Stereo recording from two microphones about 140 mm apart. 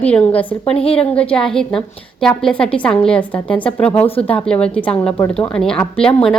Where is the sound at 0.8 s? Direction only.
45° left (ahead or behind).